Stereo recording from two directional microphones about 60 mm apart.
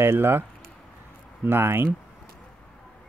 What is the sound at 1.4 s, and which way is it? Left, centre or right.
Speech, right.